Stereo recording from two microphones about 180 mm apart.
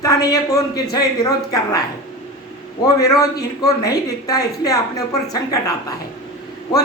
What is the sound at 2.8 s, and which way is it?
Speech, 20° left (ahead or behind).